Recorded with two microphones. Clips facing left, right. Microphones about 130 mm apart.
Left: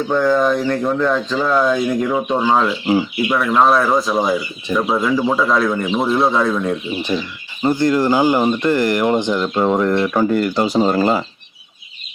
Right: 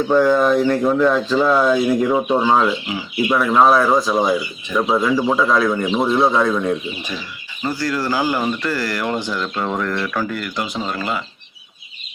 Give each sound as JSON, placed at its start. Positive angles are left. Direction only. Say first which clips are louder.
{"t": 0.1, "sound": "speech", "louder": "right 1 dB", "side_deg": -5}
{"t": 7.6, "sound": "speech", "louder": "left 7 dB", "side_deg": 20}